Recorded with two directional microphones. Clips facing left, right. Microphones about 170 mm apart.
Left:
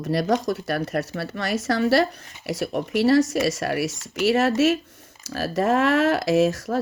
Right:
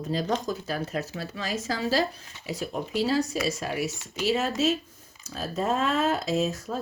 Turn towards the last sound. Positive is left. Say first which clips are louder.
# left 7 dB
turn(degrees=90)